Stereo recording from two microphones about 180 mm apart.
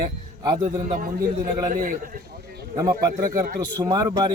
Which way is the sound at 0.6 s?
45° right (ahead or behind).